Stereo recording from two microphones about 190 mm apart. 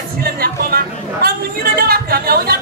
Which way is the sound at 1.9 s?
50° right (ahead or behind).